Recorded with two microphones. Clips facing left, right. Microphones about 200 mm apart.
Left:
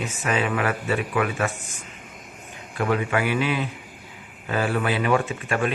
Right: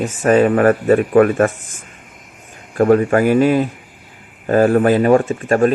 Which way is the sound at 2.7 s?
45° right (ahead or behind).